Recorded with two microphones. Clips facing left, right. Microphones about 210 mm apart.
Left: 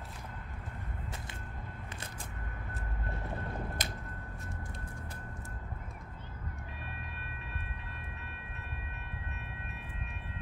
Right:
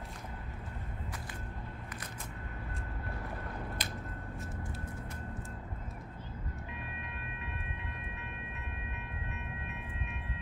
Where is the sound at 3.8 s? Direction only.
45° left (ahead or behind).